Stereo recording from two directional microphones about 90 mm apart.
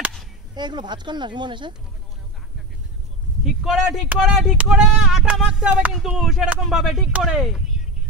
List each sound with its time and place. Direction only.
0.6 s speech: 55° right (ahead or behind)
3.6 s speech: centre (ahead or behind)